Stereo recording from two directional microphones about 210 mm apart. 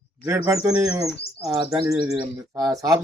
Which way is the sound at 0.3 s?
10° right (ahead or behind).